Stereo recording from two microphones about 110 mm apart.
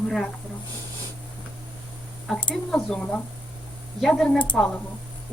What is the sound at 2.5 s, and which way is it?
Speech, 10° left (ahead or behind).